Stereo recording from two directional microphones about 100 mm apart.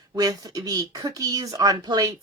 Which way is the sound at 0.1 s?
35° right (ahead or behind).